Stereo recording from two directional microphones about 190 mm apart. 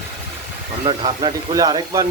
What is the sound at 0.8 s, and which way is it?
Speech, 25° right (ahead or behind).